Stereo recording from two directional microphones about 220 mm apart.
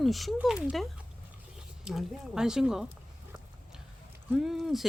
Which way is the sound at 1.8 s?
5° right (ahead or behind).